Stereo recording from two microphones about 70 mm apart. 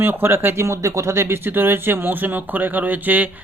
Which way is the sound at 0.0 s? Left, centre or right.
Right.